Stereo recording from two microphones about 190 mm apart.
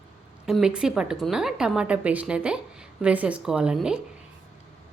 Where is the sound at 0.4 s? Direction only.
5° right (ahead or behind).